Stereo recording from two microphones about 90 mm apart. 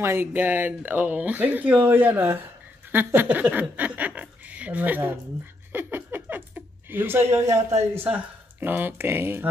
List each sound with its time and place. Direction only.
0.0 s speech: 25° right (ahead or behind)
5.7 s a sound: 20° right (ahead or behind)
7.9 s speech: 25° right (ahead or behind)